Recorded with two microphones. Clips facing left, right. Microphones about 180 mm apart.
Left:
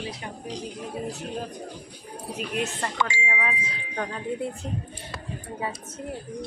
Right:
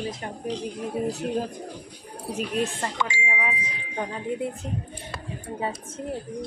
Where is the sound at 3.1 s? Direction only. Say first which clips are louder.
Even; 10° right (ahead or behind).